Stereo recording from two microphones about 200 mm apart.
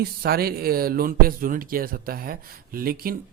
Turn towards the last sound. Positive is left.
turn(degrees=-45)  # may be behind; listen again after turning